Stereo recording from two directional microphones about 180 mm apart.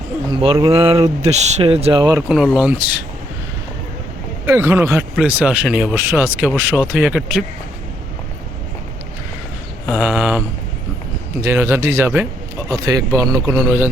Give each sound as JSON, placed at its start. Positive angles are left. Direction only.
{"t": 0.3, "sound": "speech", "side_deg": -30}
{"t": 2.3, "sound": "speech", "side_deg": -5}
{"t": 4.4, "sound": "a man's voice", "side_deg": -15}
{"t": 9.8, "sound": "a sound", "side_deg": 0}
{"t": 11.3, "sound": "a man's voice", "side_deg": -15}